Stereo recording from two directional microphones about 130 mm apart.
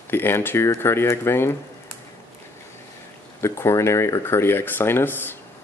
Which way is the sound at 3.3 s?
20° left (ahead or behind).